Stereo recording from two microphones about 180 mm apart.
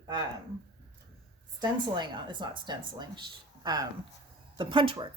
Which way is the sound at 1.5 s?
25° right (ahead or behind).